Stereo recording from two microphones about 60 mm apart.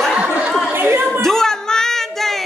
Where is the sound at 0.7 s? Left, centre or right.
Right.